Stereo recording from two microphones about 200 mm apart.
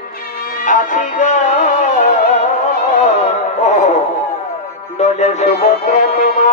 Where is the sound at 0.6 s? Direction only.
40° left (ahead or behind).